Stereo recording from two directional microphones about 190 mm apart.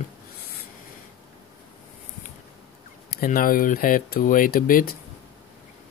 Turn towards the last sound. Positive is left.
turn(degrees=45)  # may be behind; listen again after turning